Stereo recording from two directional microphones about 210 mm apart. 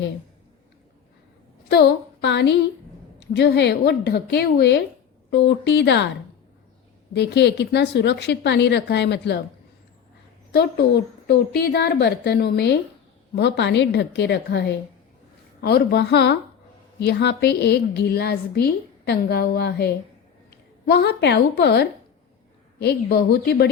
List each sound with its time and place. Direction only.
1.7 s a woman's voice: 50° left (ahead or behind)
7.1 s a woman's voice: 55° left (ahead or behind)
10.5 s a woman's voice: 50° left (ahead or behind)